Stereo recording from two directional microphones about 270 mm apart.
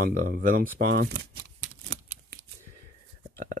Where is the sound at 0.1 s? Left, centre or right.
Right.